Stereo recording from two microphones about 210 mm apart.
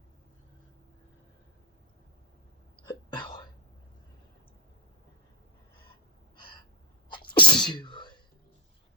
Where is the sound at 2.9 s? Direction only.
20° left (ahead or behind).